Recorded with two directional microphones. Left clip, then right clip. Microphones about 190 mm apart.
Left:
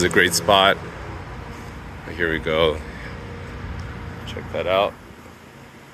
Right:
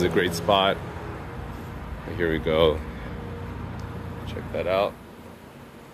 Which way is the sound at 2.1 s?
15° right (ahead or behind).